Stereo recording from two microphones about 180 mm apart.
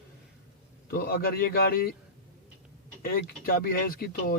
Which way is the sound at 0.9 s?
55° left (ahead or behind).